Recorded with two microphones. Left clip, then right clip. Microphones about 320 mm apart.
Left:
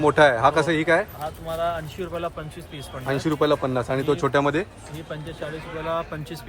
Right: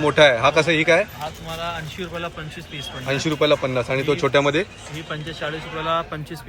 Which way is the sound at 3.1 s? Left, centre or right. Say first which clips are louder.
Right 3 dB; centre.